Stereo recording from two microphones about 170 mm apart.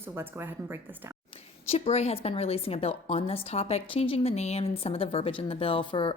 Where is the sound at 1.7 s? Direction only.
40° left (ahead or behind).